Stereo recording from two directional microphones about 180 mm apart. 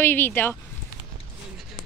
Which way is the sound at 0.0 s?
10° left (ahead or behind).